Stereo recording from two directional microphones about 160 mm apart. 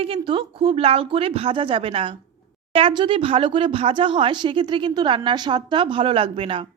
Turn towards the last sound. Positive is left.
turn(degrees=-35)  # may be behind; listen again after turning